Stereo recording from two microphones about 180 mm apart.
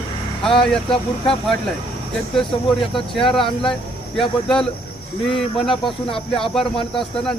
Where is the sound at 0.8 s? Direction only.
30° left (ahead or behind).